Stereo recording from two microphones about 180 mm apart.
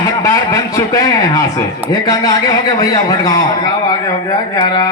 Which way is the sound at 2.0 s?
20° left (ahead or behind).